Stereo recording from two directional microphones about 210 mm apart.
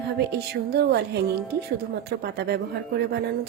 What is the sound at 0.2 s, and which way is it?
Speech, 50° right (ahead or behind).